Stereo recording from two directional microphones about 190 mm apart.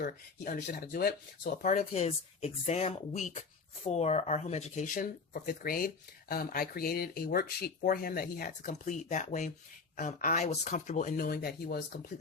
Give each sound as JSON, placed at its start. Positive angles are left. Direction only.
{"t": 0.0, "sound": "speech", "side_deg": 50}
{"t": 1.6, "sound": "speech", "side_deg": 45}